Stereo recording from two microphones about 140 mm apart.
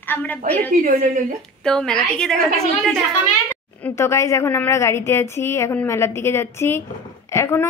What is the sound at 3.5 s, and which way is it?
A woman's voice, 10° left (ahead or behind).